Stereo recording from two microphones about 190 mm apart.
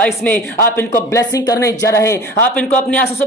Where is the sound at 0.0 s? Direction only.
5° left (ahead or behind).